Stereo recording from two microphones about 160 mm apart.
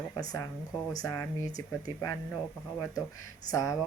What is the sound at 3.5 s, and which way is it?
Speech, 20° left (ahead or behind).